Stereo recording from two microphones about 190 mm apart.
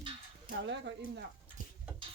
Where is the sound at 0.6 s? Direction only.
65° right (ahead or behind).